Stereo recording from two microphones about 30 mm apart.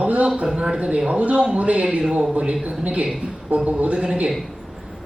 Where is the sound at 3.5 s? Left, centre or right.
Right.